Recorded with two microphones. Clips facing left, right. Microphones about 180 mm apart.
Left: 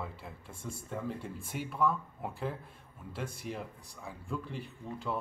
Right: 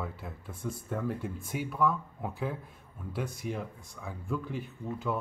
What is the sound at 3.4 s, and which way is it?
Speech, centre (ahead or behind).